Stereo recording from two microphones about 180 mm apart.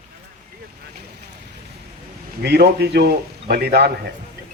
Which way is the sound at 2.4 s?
65° right (ahead or behind).